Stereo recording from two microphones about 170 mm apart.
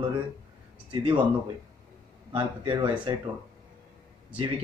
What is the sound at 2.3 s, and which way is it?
Speech, 30° right (ahead or behind).